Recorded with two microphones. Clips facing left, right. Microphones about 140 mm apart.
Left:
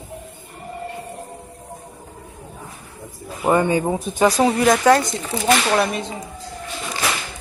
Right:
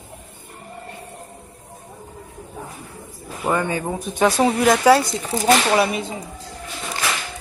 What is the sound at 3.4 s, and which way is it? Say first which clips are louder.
Speech: left 5 dB; 20° left (ahead or behind).